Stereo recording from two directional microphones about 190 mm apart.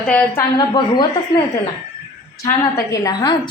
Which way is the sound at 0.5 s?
25° left (ahead or behind).